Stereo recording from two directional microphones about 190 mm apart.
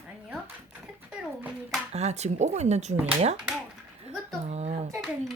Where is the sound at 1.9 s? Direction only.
35° right (ahead or behind).